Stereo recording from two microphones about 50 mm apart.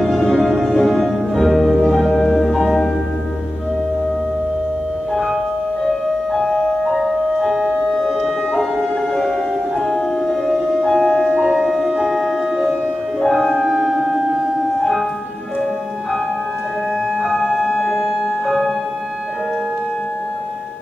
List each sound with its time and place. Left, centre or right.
0.4 s music: centre
1.5 s music: centre
1.8 s music: centre
6.3 s music: centre
7.3 s music: centre
7.9 s music: centre
9.8 s music: centre
11.0 s music: centre
13.2 s music: centre
13.7 s music: centre
17.3 s music: centre